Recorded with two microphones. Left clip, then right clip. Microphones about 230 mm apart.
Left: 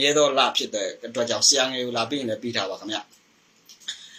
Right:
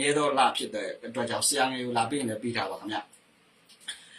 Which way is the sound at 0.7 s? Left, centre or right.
Centre.